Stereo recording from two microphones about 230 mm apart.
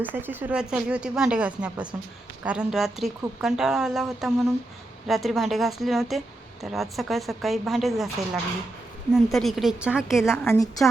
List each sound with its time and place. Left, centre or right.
0.0 s speech: centre